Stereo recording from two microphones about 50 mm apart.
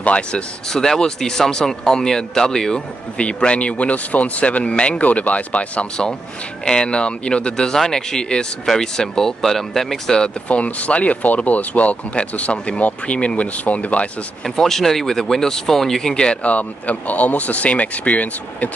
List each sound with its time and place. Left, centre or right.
0.0 s speech: left
0.7 s speech: centre; by 5.9 s left
6.6 s speech: centre
14.4 s speech: centre
16.4 s speech: left